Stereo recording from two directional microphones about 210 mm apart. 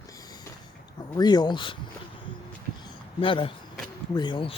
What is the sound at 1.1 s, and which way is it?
Speech, 20° left (ahead or behind).